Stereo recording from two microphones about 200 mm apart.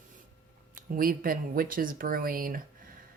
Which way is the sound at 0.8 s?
45° right (ahead or behind).